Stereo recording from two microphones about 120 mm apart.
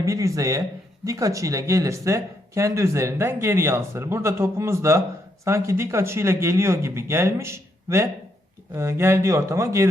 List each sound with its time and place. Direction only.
0.0 s speech: 25° right (ahead or behind)